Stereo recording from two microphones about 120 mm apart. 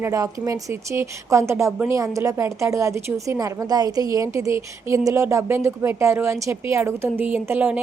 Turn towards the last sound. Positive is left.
turn(degrees=-15)  # may be behind; listen again after turning